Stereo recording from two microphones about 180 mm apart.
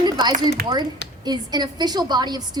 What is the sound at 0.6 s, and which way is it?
Speech, 60° right (ahead or behind).